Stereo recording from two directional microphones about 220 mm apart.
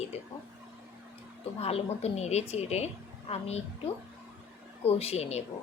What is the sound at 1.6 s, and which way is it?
Speech, 25° left (ahead or behind).